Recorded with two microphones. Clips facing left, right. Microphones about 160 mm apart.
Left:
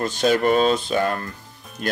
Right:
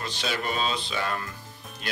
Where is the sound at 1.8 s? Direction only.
50° left (ahead or behind).